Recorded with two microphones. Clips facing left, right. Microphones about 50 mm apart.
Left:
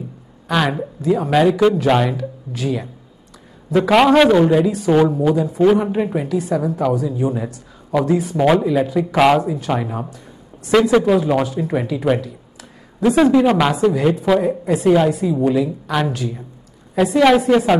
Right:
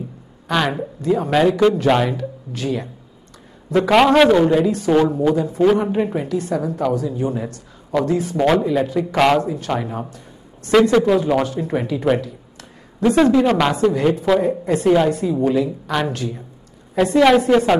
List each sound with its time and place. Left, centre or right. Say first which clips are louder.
0.5 s a woman's voice: left 1 dB; centre